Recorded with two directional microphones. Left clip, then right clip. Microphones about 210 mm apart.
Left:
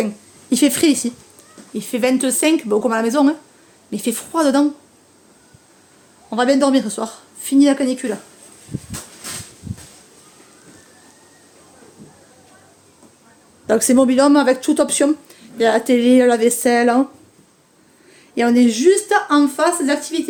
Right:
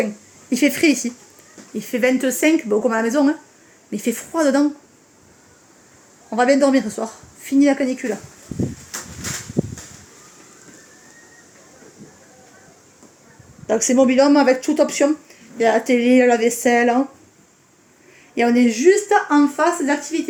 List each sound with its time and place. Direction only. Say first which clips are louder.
0.5 s a woman's voice: left 1 dB; 15° left (ahead or behind)
6.3 s a woman's voice: even; 5° left (ahead or behind)
13.7 s speech: left 1 dB; 20° left (ahead or behind)
18.3 s a woman's voice: left 1 dB; 10° left (ahead or behind)